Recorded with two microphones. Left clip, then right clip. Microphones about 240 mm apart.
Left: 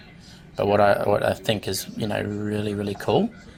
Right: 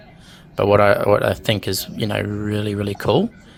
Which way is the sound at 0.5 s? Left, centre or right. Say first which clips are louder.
Right 4 dB; right.